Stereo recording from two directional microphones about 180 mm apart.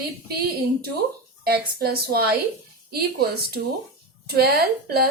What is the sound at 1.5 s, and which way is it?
A woman's voice, 60° right (ahead or behind).